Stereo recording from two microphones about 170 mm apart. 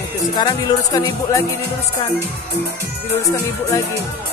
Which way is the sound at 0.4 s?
25° left (ahead or behind).